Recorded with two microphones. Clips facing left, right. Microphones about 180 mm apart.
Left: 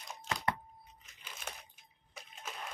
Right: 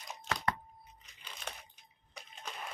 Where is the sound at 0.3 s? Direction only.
Centre (ahead or behind).